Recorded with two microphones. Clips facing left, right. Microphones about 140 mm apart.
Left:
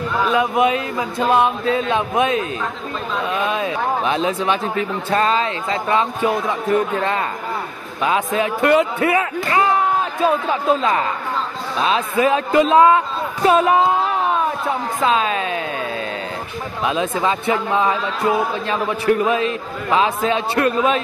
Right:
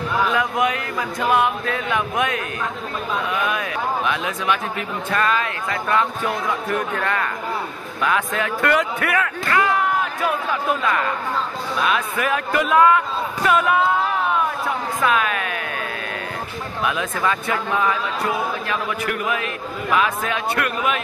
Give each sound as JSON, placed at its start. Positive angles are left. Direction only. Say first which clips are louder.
{"t": 0.3, "sound": "speech", "louder": "left 4 dB", "side_deg": 20}
{"t": 15.0, "sound": "speech", "louder": "left 2 dB", "side_deg": 25}
{"t": 16.8, "sound": "speech", "louder": "left 3 dB", "side_deg": 25}